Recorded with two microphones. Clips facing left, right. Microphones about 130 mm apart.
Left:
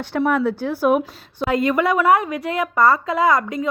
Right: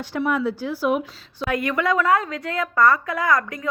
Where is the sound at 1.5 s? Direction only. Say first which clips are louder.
Left 4 dB; 30° left (ahead or behind).